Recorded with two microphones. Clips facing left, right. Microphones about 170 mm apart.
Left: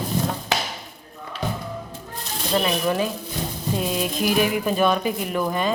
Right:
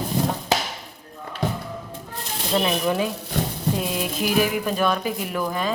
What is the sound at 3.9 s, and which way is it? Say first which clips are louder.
A woman's voice: left 2 dB; 5° right (ahead or behind).